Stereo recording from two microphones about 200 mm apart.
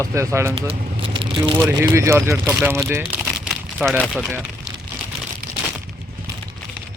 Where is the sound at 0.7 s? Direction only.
25° right (ahead or behind).